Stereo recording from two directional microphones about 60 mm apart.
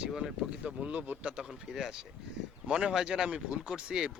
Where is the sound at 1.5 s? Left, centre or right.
Centre.